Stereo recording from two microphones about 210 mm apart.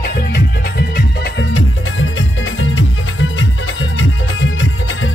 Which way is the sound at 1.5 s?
70° left (ahead or behind).